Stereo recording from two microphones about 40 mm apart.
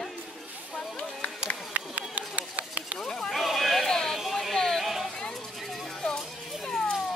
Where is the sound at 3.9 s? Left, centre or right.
Centre.